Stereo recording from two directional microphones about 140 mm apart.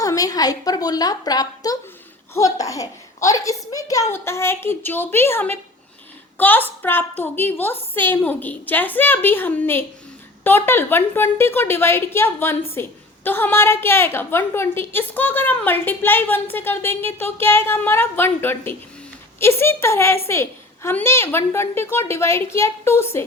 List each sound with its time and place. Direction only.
0.0 s a woman's voice: 25° left (ahead or behind)